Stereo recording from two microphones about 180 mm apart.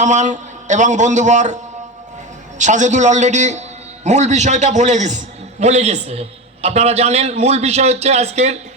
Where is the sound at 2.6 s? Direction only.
45° right (ahead or behind).